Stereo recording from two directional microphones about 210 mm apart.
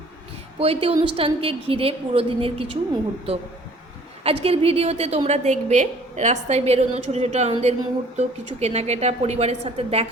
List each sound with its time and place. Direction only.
0.6 s a woman's voice: 30° right (ahead or behind)
4.4 s a woman's voice: 30° right (ahead or behind)